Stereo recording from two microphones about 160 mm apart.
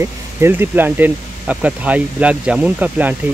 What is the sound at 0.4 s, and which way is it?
Speech, 15° right (ahead or behind).